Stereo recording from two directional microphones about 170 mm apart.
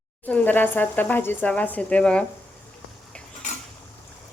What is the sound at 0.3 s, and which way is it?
Speech, 10° left (ahead or behind).